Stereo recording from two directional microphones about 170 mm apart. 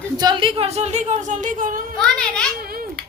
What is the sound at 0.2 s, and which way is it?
A woman's voice, 25° right (ahead or behind).